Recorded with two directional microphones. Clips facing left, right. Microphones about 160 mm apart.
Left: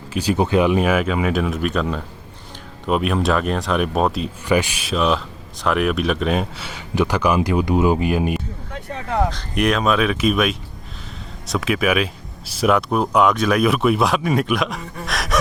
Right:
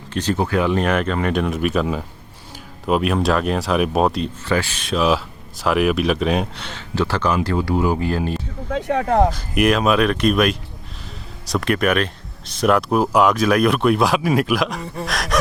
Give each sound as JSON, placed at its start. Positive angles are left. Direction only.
{"t": 0.1, "sound": "speech", "side_deg": 10}
{"t": 4.4, "sound": "speech", "side_deg": 15}
{"t": 4.9, "sound": "speech", "side_deg": 0}
{"t": 8.7, "sound": "speech", "side_deg": -70}
{"t": 9.3, "sound": "speech", "side_deg": -5}
{"t": 15.0, "sound": "gasp", "side_deg": 0}